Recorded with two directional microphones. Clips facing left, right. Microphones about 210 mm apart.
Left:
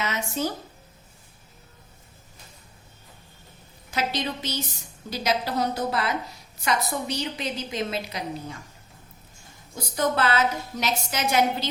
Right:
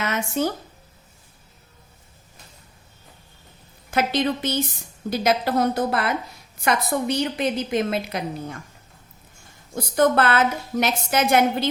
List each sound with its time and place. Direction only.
0.0 s a woman's voice: 55° right (ahead or behind)
3.9 s a woman's voice: 55° right (ahead or behind)
9.7 s a woman's voice: 55° right (ahead or behind)